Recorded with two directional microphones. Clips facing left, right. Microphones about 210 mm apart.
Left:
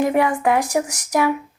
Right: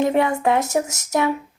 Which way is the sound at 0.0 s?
25° right (ahead or behind).